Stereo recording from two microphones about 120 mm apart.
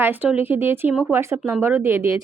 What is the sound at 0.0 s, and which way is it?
A woman's voice, 15° right (ahead or behind).